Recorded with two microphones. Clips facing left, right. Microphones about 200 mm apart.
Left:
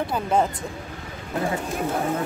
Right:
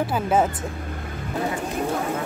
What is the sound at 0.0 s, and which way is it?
Speech, 5° right (ahead or behind).